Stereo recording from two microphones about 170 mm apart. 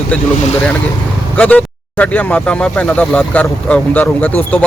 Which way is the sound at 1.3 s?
10° left (ahead or behind).